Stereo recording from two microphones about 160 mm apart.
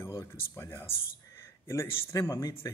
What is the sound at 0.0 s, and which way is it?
Speech, 15° left (ahead or behind).